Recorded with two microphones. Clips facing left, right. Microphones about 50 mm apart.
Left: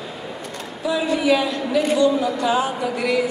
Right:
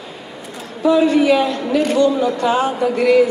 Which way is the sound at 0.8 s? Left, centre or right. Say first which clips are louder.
Right 7 dB; right.